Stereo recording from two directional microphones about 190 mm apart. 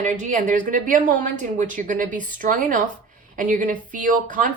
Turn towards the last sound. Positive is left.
turn(degrees=-45)  # may be behind; listen again after turning